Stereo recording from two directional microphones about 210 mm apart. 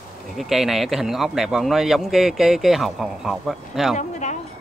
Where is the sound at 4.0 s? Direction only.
35° left (ahead or behind).